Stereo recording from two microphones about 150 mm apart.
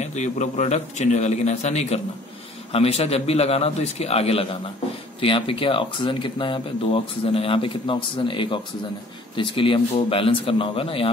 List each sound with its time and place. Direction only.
0.0 s a man's voice: 50° left (ahead or behind)